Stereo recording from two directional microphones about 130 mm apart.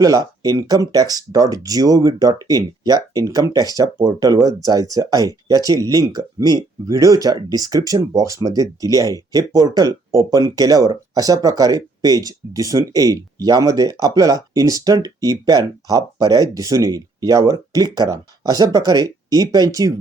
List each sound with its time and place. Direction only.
0.0 s speech: 30° right (ahead or behind)